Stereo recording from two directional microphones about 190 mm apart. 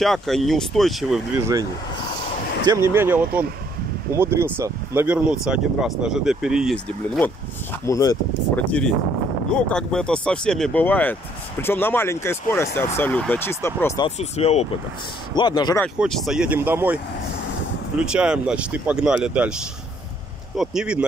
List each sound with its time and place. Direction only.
0.0 s speech: centre (ahead or behind)
2.6 s speech: 15° right (ahead or behind); by 7.3 s 5° left (ahead or behind)
7.8 s speech: 20° left (ahead or behind)
8.5 s speech: 5° left (ahead or behind)
14.0 s speech: 35° left (ahead or behind)
15.3 s speech: 25° left (ahead or behind)
16.0 s speech: centre (ahead or behind)
20.5 s speech: 5° right (ahead or behind)